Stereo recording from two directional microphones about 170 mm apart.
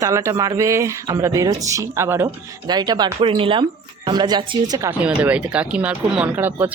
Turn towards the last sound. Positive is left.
turn(degrees=-10)  # may be behind; listen again after turning